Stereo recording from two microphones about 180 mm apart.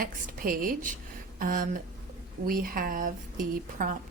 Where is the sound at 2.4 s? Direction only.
55° right (ahead or behind).